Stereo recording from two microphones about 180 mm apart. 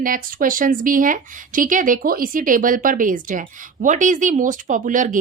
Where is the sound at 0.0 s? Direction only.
50° right (ahead or behind).